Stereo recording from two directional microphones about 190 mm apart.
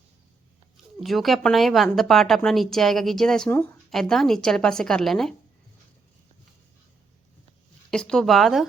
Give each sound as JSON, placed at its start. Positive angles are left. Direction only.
{"t": 0.9, "sound": "speech", "side_deg": 0}
{"t": 7.9, "sound": "speech", "side_deg": 5}